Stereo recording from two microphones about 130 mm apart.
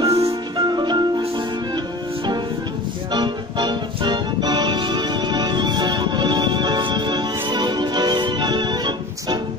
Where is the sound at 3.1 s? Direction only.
35° right (ahead or behind).